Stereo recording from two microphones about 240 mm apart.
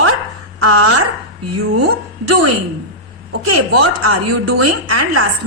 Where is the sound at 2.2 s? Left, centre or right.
Right.